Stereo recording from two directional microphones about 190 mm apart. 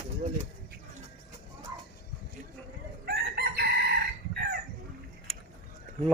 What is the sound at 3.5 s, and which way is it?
Chicken, 55° right (ahead or behind).